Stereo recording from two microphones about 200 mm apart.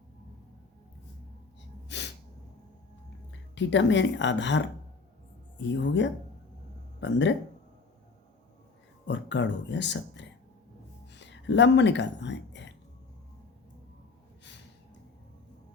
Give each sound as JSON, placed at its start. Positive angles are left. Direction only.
{"t": 1.9, "sound": "sneeze", "side_deg": 60}
{"t": 3.5, "sound": "speech", "side_deg": 65}
{"t": 5.6, "sound": "speech", "side_deg": 65}
{"t": 9.0, "sound": "speech", "side_deg": 65}
{"t": 11.3, "sound": "speech", "side_deg": 65}